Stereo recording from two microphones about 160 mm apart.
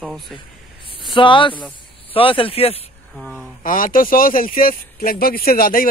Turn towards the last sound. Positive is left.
turn(degrees=65)  # may be behind; listen again after turning